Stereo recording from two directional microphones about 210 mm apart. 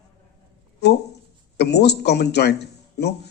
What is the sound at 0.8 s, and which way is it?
A man's voice, 55° left (ahead or behind).